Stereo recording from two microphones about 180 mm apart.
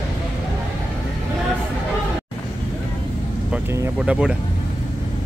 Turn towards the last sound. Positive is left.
turn(degrees=-5)  # may be behind; listen again after turning